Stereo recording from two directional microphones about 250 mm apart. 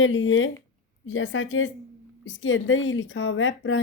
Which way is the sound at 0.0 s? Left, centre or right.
Left.